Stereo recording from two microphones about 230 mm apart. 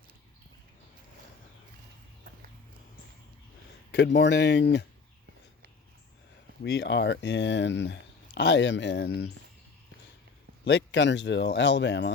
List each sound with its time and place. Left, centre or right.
3.9 s speech: left
6.6 s speech: left
10.7 s speech: left